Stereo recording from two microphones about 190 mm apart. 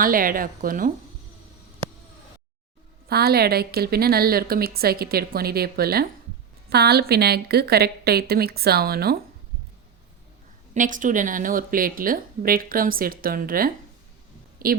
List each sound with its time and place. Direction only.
0.0 s a woman's voice: 50° right (ahead or behind)
3.1 s a woman's voice: 55° right (ahead or behind)
10.8 s a woman's voice: 45° right (ahead or behind)